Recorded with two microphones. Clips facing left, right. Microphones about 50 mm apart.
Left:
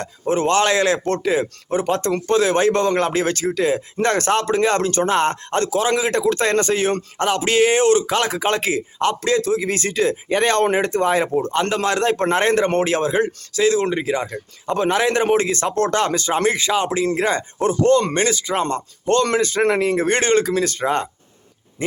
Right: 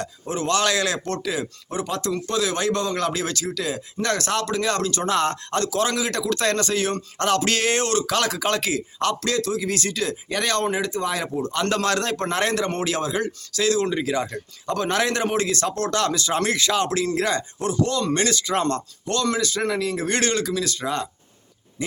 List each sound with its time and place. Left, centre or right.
0.0 s a man's voice: left
7.2 s a man's voice: centre; by 11.5 s left
11.7 s a man's voice: centre
18.3 s speech: centre
19.0 s a man's voice: left